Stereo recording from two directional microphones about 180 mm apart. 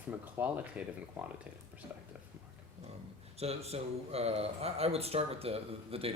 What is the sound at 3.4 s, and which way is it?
Speech, 35° right (ahead or behind).